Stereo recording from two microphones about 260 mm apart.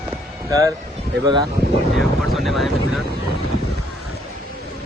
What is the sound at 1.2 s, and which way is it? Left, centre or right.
Speech, centre.